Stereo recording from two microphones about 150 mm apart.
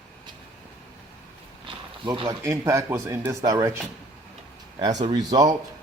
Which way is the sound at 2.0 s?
30° right (ahead or behind).